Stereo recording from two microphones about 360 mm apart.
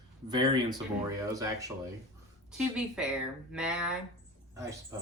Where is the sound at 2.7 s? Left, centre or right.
Centre.